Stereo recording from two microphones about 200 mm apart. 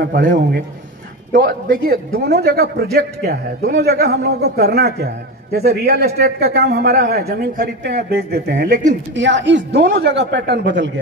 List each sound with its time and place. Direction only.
0.0 s a man's voice: 45° right (ahead or behind)
1.3 s a man's voice: 45° right (ahead or behind)
8.5 s a woman's voice: 40° right (ahead or behind)
9.1 s a man's voice: 65° right (ahead or behind)